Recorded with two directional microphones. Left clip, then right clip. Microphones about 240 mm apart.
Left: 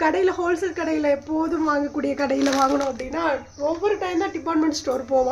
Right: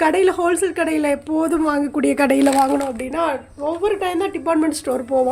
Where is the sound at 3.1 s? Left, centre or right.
Right.